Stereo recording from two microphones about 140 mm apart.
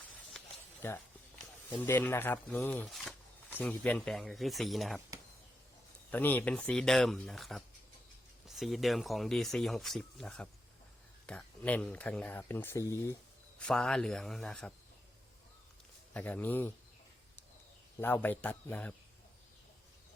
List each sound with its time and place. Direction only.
0.4 s snake: 5° left (ahead or behind)
0.8 s speech: 15° left (ahead or behind)
2.8 s a sound: centre (ahead or behind)
3.5 s speech: 10° left (ahead or behind)
6.1 s speech: 10° left (ahead or behind)
13.6 s speech: 5° left (ahead or behind)
16.1 s speech: 10° left (ahead or behind)
18.0 s speech: 15° left (ahead or behind)